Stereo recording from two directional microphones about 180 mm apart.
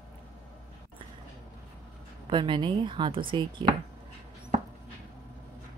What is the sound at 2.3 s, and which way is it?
A woman's voice, 25° right (ahead or behind).